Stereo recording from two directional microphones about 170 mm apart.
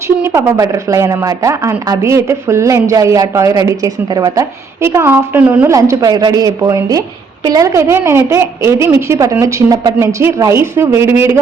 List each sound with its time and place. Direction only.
0.2 s a woman's voice: 15° right (ahead or behind)
5.7 s a woman's voice: 20° right (ahead or behind)